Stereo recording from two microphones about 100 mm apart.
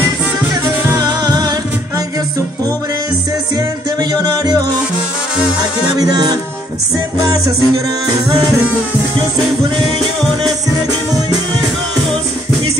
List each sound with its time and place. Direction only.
0.9 s music: 40° right (ahead or behind)
5.6 s music: 40° right (ahead or behind)